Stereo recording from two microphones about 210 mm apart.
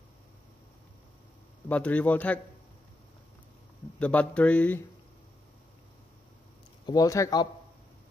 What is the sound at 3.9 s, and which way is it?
Speech, 5° left (ahead or behind).